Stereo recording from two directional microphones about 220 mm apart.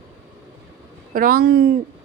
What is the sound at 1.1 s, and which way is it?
Speech, 40° right (ahead or behind).